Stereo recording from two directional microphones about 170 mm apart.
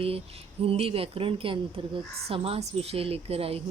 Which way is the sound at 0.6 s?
35° right (ahead or behind).